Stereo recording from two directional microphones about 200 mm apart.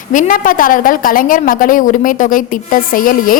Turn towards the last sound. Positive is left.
turn(degrees=45)  # may be behind; listen again after turning